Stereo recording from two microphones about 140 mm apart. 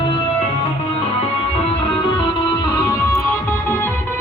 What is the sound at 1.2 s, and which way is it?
Music, 45° left (ahead or behind).